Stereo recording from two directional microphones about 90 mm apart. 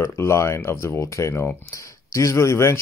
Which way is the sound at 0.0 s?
30° left (ahead or behind).